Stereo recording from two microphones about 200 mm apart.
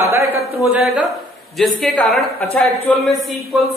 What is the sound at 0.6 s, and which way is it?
A man's voice, centre (ahead or behind).